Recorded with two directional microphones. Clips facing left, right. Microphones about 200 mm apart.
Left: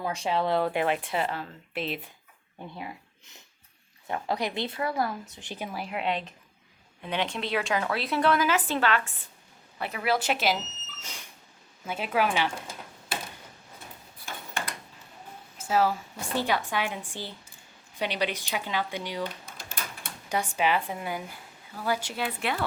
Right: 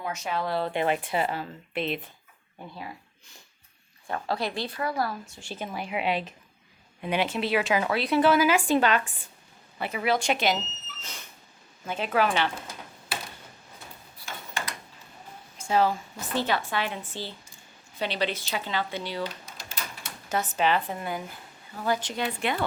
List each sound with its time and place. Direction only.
0.0 s speech: 30° left (ahead or behind)
0.6 s speech: 5° left (ahead or behind)
2.7 s a woman's voice: 20° left (ahead or behind); by 9.2 s 15° right (ahead or behind)
9.7 s speech: centre (ahead or behind)
11.0 s a sound: 10° left (ahead or behind)
11.9 s a woman's voice: 10° left (ahead or behind)
14.2 s a sound: 55° left (ahead or behind)
15.5 s a woman's voice: 5° left (ahead or behind)
19.5 s a sound: 55° left (ahead or behind)
20.3 s a woman's voice: 10° left (ahead or behind)